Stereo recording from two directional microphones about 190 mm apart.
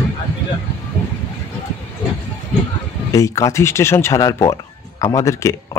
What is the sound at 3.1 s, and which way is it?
A man's voice, 15° left (ahead or behind).